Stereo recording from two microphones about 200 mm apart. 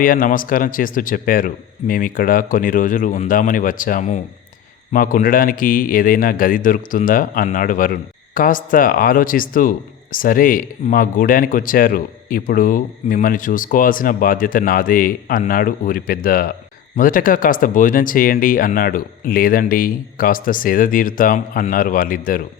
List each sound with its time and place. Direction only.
0.0 s speech: 45° left (ahead or behind)